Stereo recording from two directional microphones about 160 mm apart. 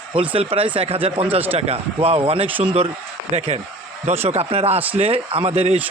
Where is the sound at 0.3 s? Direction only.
35° right (ahead or behind).